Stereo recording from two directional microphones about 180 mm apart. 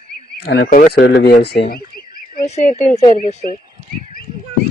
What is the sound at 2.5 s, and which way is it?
Speech, 40° left (ahead or behind).